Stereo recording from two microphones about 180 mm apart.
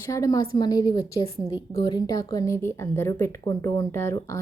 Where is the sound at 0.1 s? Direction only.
20° left (ahead or behind).